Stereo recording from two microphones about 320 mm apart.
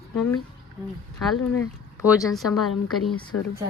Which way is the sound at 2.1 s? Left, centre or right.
Centre.